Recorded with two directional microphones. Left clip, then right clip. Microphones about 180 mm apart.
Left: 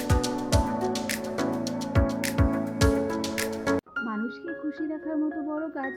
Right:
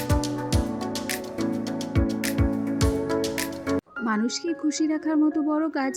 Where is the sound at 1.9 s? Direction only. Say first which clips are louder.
Even; centre (ahead or behind).